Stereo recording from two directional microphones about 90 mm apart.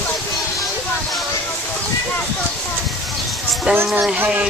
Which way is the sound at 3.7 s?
25° right (ahead or behind).